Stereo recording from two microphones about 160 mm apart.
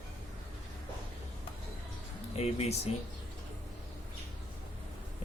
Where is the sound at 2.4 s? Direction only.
40° left (ahead or behind).